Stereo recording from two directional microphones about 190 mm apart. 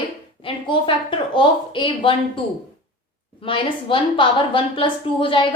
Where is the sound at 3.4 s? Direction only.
25° left (ahead or behind).